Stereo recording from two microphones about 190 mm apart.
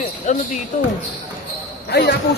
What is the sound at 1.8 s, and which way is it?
Speech, 60° left (ahead or behind).